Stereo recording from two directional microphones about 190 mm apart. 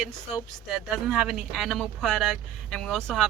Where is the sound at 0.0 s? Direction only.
Centre (ahead or behind).